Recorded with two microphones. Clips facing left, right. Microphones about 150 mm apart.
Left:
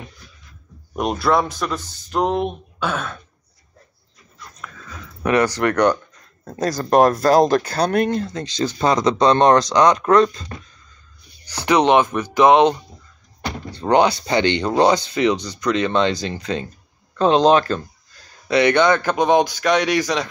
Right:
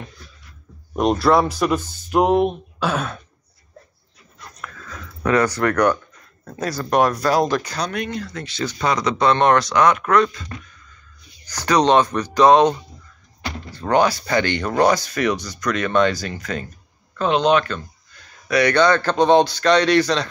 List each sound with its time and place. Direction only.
0.9 s speech: centre (ahead or behind)
5.2 s speech: 15° left (ahead or behind)
5.7 s speech: 30° left (ahead or behind)
6.6 s speech: 40° left (ahead or behind)
8.2 s speech: 25° left (ahead or behind)
11.6 s speech: 15° left (ahead or behind)
13.7 s speech: 25° left (ahead or behind)
18.5 s speech: 20° left (ahead or behind)